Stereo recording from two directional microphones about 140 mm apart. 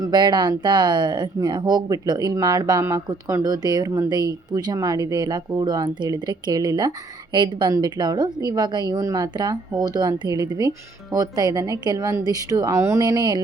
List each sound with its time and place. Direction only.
0.0 s a woman's voice: 30° right (ahead or behind)